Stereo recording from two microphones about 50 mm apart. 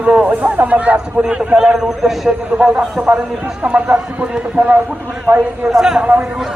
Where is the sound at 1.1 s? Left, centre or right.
Centre.